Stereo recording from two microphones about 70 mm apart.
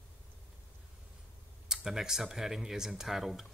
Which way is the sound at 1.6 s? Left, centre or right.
Centre.